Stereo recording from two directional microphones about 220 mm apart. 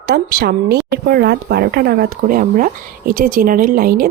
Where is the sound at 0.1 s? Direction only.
45° right (ahead or behind).